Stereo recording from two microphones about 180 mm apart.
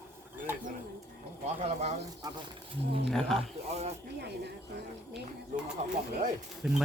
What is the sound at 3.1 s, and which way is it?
Speech, 5° left (ahead or behind).